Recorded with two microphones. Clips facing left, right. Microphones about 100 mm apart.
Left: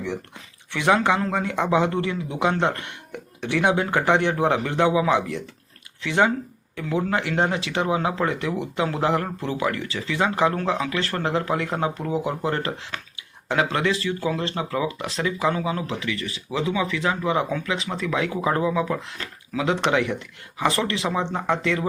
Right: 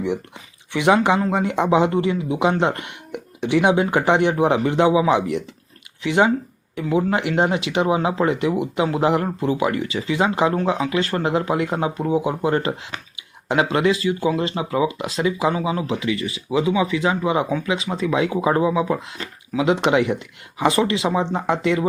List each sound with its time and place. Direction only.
0.7 s speech: 15° right (ahead or behind)